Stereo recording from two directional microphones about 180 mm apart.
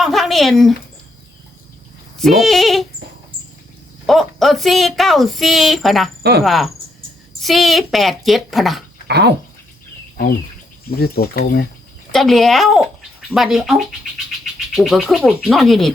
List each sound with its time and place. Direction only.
0.0 s a sound: centre (ahead or behind)
2.1 s speech: centre (ahead or behind)
4.0 s speech: centre (ahead or behind)
9.0 s speech: 65° right (ahead or behind)
10.9 s speech: 55° left (ahead or behind)
12.1 s speech: centre (ahead or behind)